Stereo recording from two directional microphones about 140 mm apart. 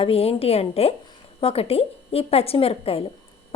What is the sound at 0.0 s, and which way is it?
Speech, 45° left (ahead or behind).